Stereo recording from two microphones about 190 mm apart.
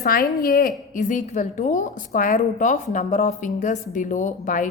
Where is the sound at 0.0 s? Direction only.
55° left (ahead or behind).